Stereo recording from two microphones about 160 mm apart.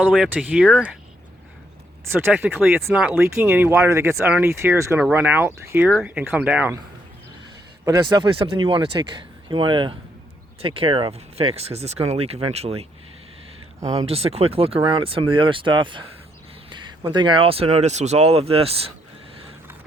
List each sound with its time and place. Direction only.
0.1 s speech: 5° right (ahead or behind)
2.1 s speech: 10° right (ahead or behind)
7.9 s speech: 25° right (ahead or behind)
14.1 s speech: 40° right (ahead or behind)